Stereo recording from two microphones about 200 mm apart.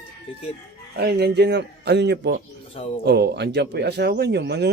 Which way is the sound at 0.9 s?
55° right (ahead or behind).